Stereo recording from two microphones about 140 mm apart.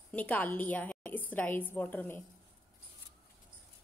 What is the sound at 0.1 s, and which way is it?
A woman's voice, 10° left (ahead or behind).